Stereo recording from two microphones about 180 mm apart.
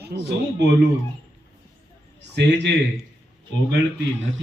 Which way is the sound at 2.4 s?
70° right (ahead or behind).